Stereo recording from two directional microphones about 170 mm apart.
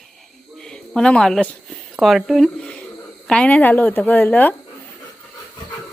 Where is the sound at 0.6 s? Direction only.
5° left (ahead or behind).